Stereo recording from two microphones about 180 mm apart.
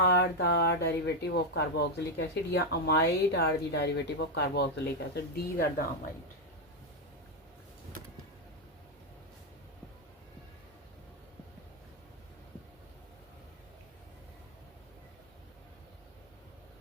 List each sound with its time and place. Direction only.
0.0 s speech: 60° left (ahead or behind)